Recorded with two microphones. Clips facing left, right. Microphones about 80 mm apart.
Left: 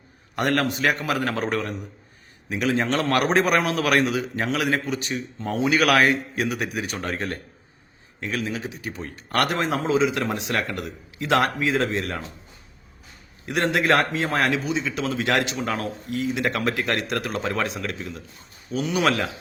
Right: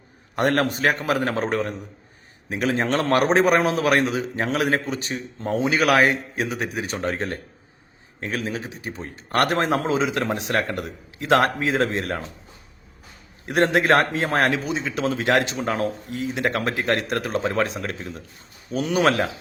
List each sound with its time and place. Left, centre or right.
0.3 s a man's voice: right
8.2 s a man's voice: right
13.4 s a man's voice: right